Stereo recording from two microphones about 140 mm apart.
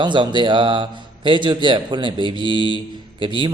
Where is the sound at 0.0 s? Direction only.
35° right (ahead or behind).